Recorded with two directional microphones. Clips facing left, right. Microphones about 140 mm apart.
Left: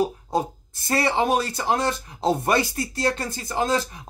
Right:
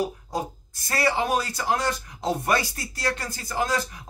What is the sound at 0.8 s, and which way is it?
Speech, 25° left (ahead or behind).